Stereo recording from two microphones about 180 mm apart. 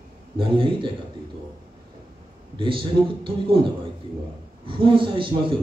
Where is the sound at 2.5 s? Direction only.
30° right (ahead or behind).